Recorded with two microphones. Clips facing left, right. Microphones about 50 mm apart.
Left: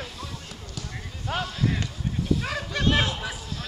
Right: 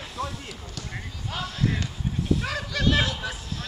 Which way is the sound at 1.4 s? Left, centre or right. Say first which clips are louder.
Even; centre.